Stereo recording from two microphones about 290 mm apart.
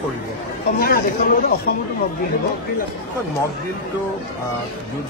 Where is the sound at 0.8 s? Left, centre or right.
Left.